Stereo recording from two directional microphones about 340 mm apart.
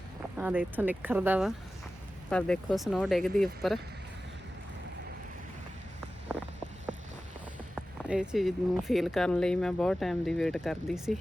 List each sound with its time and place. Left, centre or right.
0.3 s speech: centre
6.3 s vehicle: centre
7.8 s speech: centre